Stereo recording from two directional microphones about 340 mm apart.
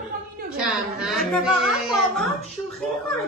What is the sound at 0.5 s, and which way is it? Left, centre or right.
Speech, centre.